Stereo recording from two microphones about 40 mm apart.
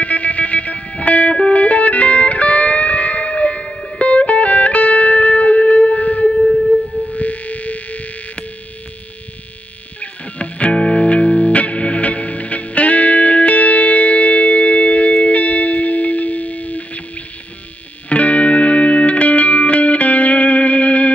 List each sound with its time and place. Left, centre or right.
0.0 s music: left
6.3 s music: centre
7.1 s music: left
9.9 s music: left
18.1 s music: left